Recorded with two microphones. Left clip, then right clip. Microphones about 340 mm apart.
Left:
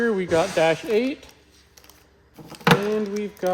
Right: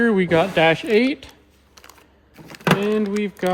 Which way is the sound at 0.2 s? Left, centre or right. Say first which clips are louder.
Right 3 dB; right.